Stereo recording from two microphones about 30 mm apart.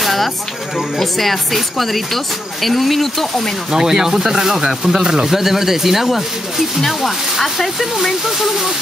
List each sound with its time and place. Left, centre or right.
0.0 s a sound: centre
0.9 s speech: centre
3.7 s speech: centre
8.3 s speech: centre